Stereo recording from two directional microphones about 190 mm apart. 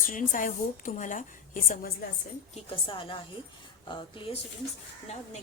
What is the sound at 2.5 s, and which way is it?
A woman's voice, 25° left (ahead or behind).